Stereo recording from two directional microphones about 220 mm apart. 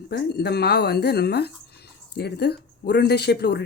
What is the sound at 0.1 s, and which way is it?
Speech, 50° left (ahead or behind).